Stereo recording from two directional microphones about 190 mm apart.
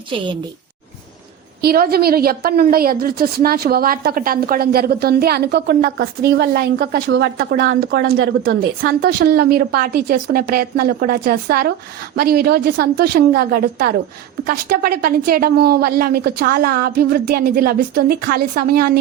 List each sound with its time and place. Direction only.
0.1 s a woman's voice: 25° right (ahead or behind)
1.6 s a woman's voice: 50° right (ahead or behind)